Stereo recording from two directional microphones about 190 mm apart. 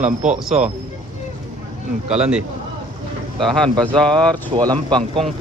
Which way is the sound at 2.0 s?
35° right (ahead or behind).